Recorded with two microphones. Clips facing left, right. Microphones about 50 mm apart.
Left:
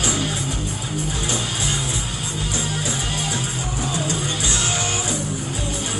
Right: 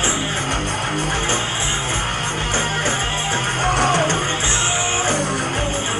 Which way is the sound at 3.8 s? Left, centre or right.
Right.